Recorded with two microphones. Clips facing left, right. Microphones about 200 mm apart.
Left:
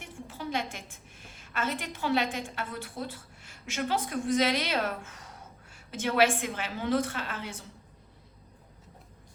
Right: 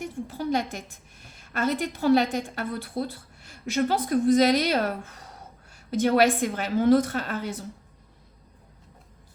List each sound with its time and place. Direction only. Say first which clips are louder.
0.0 s a woman's voice: right 8 dB; 40° right (ahead or behind)